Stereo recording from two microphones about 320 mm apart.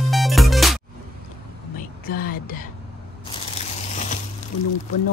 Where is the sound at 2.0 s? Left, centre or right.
Left.